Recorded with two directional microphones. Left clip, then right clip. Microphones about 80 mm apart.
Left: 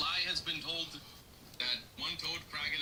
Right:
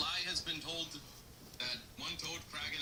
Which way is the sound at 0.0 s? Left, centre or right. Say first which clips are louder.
Left 3 dB; left.